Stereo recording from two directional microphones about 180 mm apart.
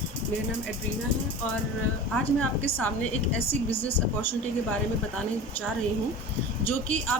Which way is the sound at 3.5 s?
30° left (ahead or behind).